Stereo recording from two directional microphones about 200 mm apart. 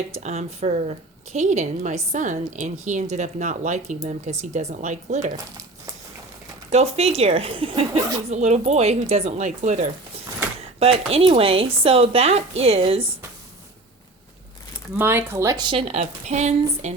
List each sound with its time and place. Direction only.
0.1 s speech: 35° right (ahead or behind)
6.7 s speech: 30° right (ahead or behind)
10.8 s speech: 30° right (ahead or behind)
14.9 s speech: 10° right (ahead or behind); by 17.0 s 35° right (ahead or behind)